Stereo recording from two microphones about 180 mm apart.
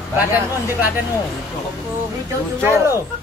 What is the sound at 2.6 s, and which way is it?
Speech, 15° right (ahead or behind).